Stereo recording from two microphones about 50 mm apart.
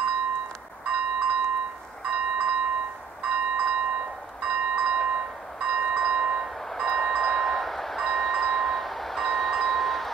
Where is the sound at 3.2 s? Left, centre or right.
Centre.